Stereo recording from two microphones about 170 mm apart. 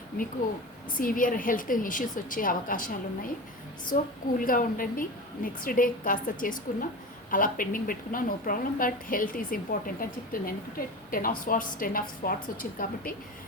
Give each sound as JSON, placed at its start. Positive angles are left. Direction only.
{"t": 0.9, "sound": "a woman's voice", "side_deg": 55}